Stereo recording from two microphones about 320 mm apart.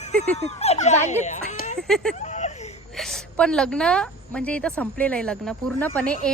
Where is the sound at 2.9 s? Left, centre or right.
Centre.